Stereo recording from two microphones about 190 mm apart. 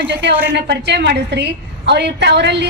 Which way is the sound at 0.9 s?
65° right (ahead or behind).